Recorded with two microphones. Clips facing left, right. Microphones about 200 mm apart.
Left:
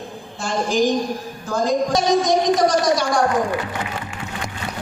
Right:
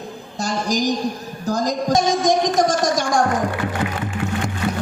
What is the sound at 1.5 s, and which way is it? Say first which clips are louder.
Music: left 1 dB; 40° right (ahead or behind).